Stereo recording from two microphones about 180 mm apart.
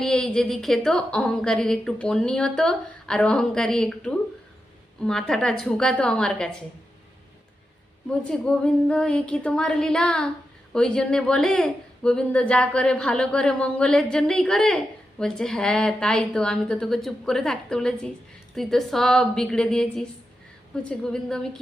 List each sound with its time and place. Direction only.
0.0 s a woman's voice: 5° left (ahead or behind)
8.2 s a woman's voice: 5° left (ahead or behind)